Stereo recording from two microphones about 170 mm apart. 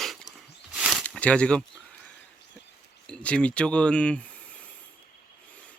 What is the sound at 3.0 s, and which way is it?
Speech, 5° left (ahead or behind).